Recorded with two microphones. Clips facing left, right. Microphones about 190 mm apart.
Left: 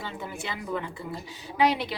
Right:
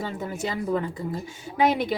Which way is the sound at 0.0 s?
45° right (ahead or behind).